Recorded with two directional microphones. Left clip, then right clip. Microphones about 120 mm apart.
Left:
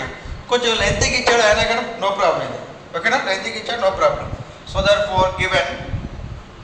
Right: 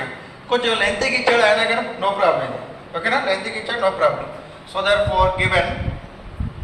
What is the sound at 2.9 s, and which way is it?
A man's voice, 45° left (ahead or behind).